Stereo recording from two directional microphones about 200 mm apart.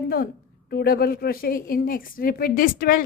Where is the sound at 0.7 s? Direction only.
50° left (ahead or behind).